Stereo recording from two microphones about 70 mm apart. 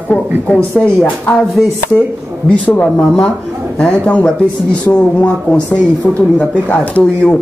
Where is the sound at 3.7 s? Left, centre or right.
Centre.